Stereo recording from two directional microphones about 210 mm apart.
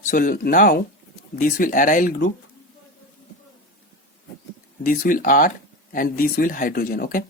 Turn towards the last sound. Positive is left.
turn(degrees=45)  # may be behind; listen again after turning